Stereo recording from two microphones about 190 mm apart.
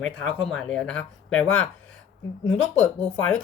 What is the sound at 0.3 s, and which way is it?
Speech, centre (ahead or behind).